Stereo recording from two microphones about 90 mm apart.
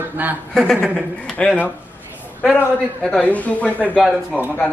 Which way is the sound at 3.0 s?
10° left (ahead or behind).